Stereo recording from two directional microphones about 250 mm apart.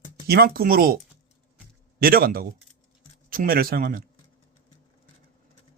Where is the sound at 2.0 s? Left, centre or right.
Right.